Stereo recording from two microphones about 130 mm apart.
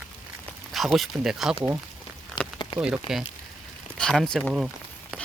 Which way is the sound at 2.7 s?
10° right (ahead or behind).